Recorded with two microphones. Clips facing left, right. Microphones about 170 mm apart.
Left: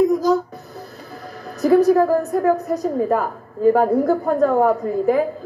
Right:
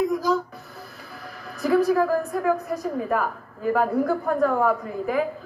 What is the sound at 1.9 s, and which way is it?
Speech, 25° left (ahead or behind).